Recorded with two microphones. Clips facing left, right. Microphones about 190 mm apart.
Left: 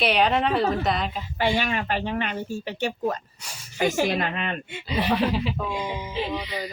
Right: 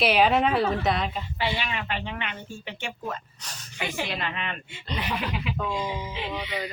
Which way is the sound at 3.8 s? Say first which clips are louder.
Left 8 dB; 45° left (ahead or behind).